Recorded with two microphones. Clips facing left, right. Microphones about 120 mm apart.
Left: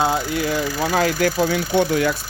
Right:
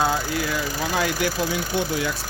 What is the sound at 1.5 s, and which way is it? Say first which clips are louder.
Speech: left 6 dB; 55° left (ahead or behind).